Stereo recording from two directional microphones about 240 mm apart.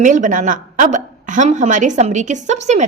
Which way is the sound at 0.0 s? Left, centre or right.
Right.